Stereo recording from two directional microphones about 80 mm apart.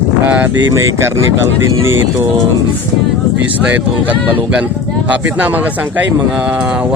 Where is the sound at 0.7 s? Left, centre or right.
Right.